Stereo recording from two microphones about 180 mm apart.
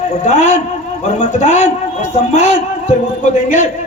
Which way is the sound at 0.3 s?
40° left (ahead or behind).